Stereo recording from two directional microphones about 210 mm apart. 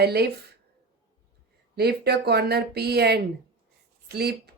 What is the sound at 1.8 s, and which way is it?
Speech, 50° right (ahead or behind).